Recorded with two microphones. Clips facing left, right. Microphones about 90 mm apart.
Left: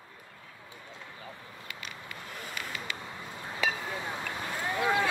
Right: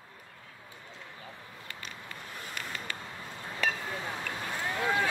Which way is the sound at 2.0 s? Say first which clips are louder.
Left 1 dB; 15° left (ahead or behind).